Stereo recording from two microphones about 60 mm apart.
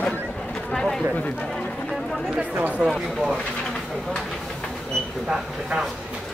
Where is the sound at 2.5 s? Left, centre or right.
Right.